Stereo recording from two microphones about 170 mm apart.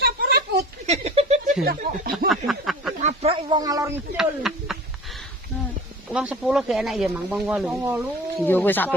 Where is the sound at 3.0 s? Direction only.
35° right (ahead or behind); by 4.0 s 20° right (ahead or behind).